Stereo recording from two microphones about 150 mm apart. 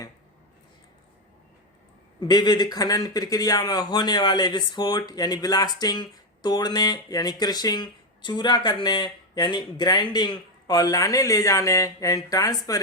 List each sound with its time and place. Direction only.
2.2 s speech: 30° left (ahead or behind)